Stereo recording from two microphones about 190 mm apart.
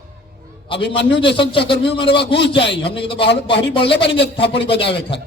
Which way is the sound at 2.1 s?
60° left (ahead or behind).